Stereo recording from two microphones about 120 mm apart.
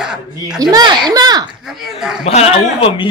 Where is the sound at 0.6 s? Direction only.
35° right (ahead or behind).